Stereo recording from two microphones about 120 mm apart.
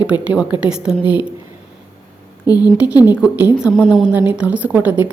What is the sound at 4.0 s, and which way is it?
A woman's voice, 10° right (ahead or behind).